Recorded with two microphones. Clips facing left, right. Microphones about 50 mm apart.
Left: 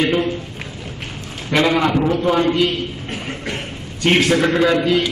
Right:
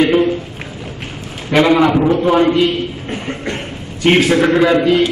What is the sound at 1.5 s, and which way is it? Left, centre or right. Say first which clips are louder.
A man's voice: right 5 dB; centre.